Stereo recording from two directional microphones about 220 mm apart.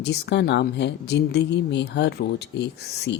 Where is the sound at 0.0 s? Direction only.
50° left (ahead or behind).